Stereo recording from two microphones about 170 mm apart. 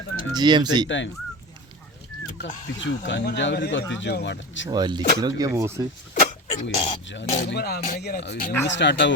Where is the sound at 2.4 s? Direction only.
90° left.